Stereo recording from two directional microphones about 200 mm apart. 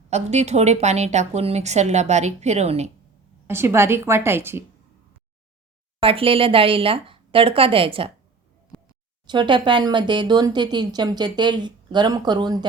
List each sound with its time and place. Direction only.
0.1 s a woman's voice: 35° right (ahead or behind)
3.4 s a woman's voice: 10° right (ahead or behind)
6.0 s speech: 25° right (ahead or behind)
9.2 s speech: 20° right (ahead or behind)